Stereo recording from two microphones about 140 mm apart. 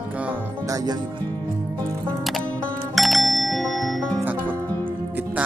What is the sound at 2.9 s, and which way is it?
Music, centre (ahead or behind).